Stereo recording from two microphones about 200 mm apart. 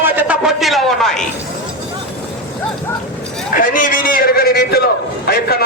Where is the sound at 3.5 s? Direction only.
45° left (ahead or behind).